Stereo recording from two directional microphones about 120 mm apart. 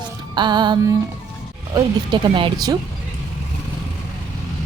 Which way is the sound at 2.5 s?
30° right (ahead or behind).